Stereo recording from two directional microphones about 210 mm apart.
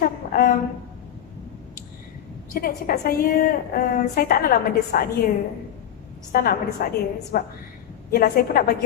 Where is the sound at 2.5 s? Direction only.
45° left (ahead or behind).